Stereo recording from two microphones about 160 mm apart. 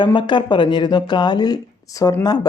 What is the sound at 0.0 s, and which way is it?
Speech, 30° left (ahead or behind).